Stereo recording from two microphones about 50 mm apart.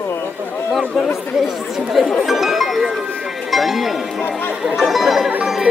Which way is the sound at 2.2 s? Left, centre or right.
Centre.